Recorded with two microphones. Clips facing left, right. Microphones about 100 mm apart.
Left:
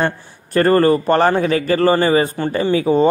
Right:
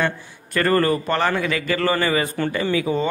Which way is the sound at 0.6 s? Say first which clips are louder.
Left 6 dB; 35° left (ahead or behind).